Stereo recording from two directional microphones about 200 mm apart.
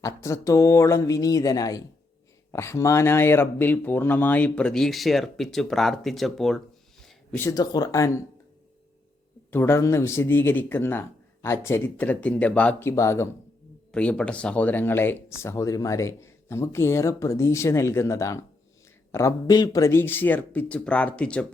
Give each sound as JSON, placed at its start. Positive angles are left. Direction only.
{"t": 0.0, "sound": "speech", "side_deg": 15}
{"t": 9.5, "sound": "speech", "side_deg": 10}